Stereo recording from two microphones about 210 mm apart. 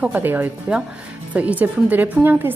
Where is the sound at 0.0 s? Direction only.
10° right (ahead or behind).